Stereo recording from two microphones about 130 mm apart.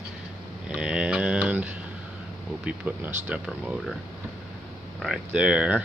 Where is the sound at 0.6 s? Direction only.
5° right (ahead or behind).